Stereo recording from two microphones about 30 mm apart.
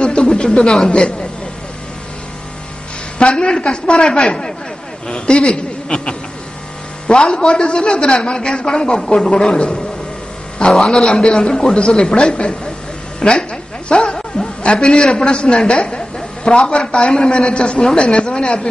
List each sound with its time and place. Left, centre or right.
0.0 s a sound: left
0.8 s speech: left
3.2 s a woman's voice: left
5.0 s a woman's voice: left
10.9 s speech: left
13.2 s a sound: left
15.1 s a man's voice: left